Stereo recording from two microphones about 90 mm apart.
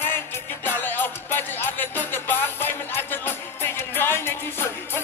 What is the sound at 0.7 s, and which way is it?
Music, 20° left (ahead or behind).